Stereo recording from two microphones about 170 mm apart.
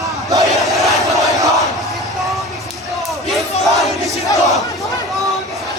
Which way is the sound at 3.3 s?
Centre (ahead or behind).